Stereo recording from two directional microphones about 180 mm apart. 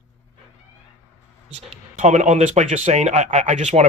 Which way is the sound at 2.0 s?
40° right (ahead or behind).